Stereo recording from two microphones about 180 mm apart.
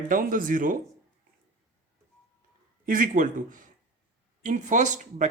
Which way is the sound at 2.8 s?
50° right (ahead or behind).